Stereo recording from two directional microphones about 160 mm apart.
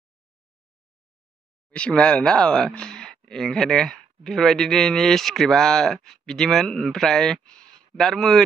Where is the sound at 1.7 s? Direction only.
5° left (ahead or behind).